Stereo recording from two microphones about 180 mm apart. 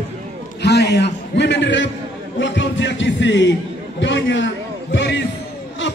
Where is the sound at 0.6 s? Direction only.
70° left (ahead or behind).